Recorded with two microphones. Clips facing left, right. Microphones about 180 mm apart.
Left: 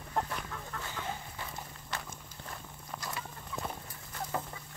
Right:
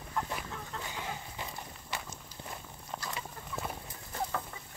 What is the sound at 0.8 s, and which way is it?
Horse, 15° right (ahead or behind).